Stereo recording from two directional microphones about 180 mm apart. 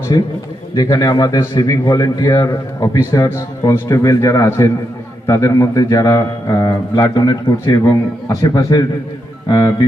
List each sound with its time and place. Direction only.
0.1 s a man's voice: 25° left (ahead or behind)